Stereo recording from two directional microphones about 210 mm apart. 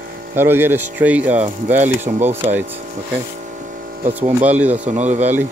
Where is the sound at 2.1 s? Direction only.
35° right (ahead or behind).